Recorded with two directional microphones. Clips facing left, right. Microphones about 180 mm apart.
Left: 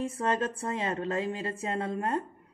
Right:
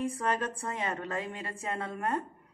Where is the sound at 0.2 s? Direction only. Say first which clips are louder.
Left 3 dB; 25° left (ahead or behind).